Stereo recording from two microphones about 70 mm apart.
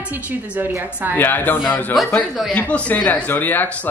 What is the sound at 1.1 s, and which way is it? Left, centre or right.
Speech, left.